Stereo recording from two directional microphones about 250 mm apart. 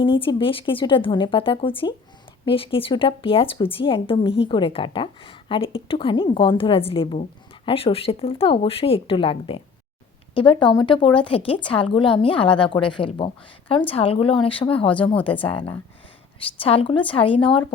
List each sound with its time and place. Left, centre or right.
0.0 s speech: centre